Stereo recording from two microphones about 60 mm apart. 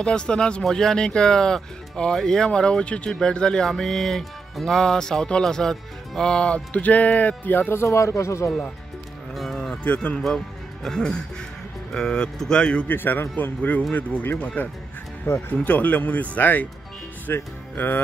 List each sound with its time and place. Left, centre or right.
0.0 s speech: centre
6.5 s speech: left
7.7 s speech: left
9.3 s cattle: centre
9.8 s speech: left
10.2 s speech: centre
12.8 s a man's voice: left
15.3 s speech: left
15.6 s speech: left
17.3 s music: left